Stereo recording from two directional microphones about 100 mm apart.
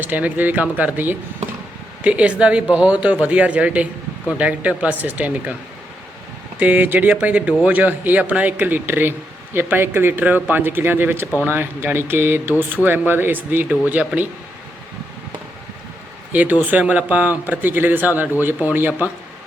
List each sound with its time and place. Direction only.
0.0 s speech: 15° right (ahead or behind)
6.6 s speech: 20° right (ahead or behind)
16.3 s speech: 15° right (ahead or behind)